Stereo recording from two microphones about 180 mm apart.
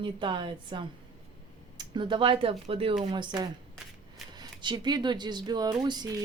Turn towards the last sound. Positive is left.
turn(degrees=-25)  # may be behind; listen again after turning